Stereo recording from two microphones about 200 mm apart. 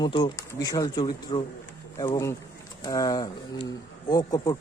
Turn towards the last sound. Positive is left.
turn(degrees=20)  # may be behind; listen again after turning